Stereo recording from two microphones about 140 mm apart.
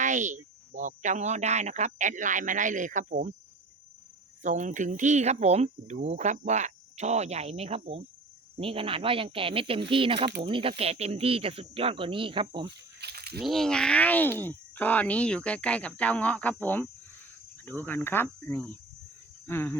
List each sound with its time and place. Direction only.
0.0 s speech: 60° right (ahead or behind)
4.4 s speech: 60° right (ahead or behind); by 12.5 s 40° right (ahead or behind)
13.4 s speech: centre (ahead or behind)